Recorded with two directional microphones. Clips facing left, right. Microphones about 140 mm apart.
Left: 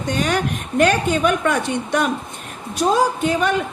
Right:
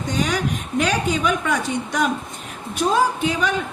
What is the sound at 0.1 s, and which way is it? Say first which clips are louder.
A woman's voice: left 2 dB; 60° left (ahead or behind).